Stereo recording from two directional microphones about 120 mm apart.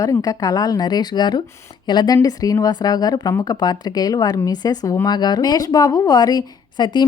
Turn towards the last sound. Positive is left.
turn(degrees=35)  # may be behind; listen again after turning